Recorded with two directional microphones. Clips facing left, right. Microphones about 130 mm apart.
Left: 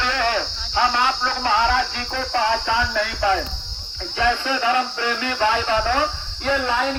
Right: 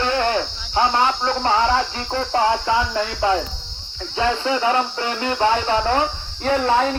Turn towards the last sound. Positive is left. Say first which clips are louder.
# right 4 dB
turn(degrees=-35)  # may be behind; listen again after turning